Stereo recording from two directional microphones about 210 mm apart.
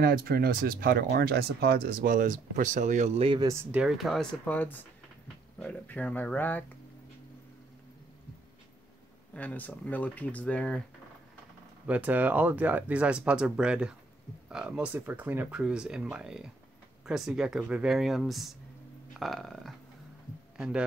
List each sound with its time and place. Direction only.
0.0 s speech: 45° right (ahead or behind); by 6.6 s 10° left (ahead or behind)
9.3 s speech: 5° left (ahead or behind)
11.9 s speech: 5° right (ahead or behind)